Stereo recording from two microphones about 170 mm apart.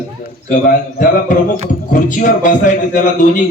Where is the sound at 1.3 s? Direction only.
50° left (ahead or behind).